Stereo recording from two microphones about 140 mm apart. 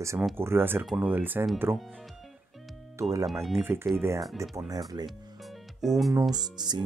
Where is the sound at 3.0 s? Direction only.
20° right (ahead or behind).